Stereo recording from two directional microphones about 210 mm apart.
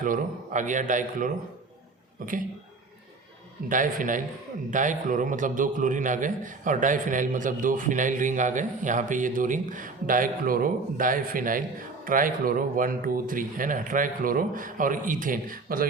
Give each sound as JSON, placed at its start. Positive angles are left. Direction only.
{"t": 0.0, "sound": "a man's voice", "side_deg": -40}
{"t": 3.7, "sound": "a man's voice", "side_deg": -40}